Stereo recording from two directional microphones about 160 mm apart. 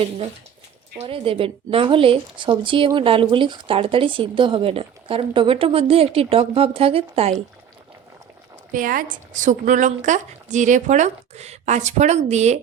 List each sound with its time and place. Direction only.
0.9 s a woman's voice: 35° right (ahead or behind)
8.7 s a woman's voice: 60° right (ahead or behind); by 12.5 s 45° right (ahead or behind)